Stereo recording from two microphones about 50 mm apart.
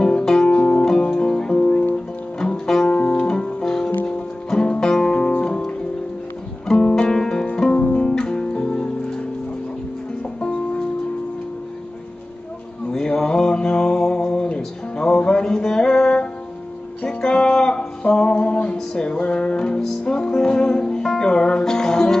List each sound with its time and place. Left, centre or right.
0.0 s music: centre
6.7 s music: centre
10.4 s music: centre
12.9 s a sound: centre
17.0 s music: centre